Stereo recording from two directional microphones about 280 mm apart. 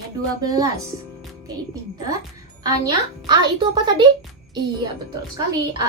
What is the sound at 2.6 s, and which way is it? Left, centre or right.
A woman's voice, centre.